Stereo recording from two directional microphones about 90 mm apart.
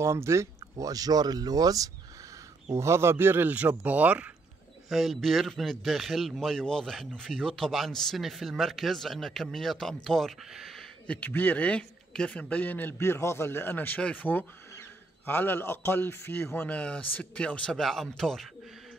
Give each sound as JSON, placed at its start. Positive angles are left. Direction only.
{"t": 0.0, "sound": "speech", "side_deg": -30}
{"t": 2.7, "sound": "speech", "side_deg": -30}
{"t": 4.8, "sound": "a man's voice", "side_deg": 0}
{"t": 11.1, "sound": "a man's voice", "side_deg": 20}
{"t": 16.6, "sound": "speech", "side_deg": 15}